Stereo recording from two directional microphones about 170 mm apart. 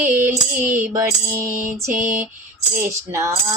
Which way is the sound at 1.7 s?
15° right (ahead or behind).